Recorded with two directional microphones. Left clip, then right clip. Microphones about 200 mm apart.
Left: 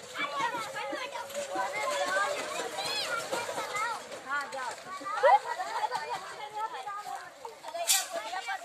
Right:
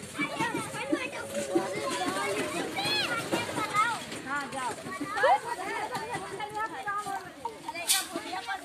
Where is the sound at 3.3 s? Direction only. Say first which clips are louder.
Right 5 dB; 45° left (ahead or behind).